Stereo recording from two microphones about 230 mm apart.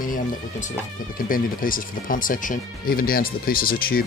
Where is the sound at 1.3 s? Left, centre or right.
Left.